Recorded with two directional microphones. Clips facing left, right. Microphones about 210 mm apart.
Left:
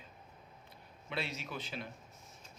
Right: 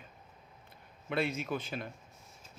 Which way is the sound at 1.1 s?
50° right (ahead or behind).